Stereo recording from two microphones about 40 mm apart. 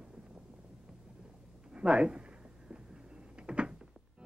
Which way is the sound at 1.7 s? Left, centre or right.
Right.